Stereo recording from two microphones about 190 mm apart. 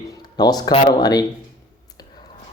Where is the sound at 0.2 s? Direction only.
20° left (ahead or behind).